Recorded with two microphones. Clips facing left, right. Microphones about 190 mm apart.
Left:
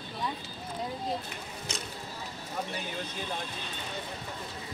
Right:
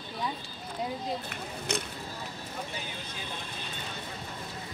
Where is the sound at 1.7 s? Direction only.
60° right (ahead or behind).